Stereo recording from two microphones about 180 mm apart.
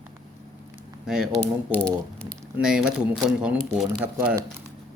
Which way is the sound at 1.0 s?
5° right (ahead or behind).